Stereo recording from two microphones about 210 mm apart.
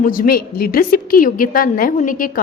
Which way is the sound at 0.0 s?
40° left (ahead or behind).